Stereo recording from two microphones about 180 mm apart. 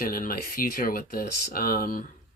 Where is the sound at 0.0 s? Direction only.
50° left (ahead or behind).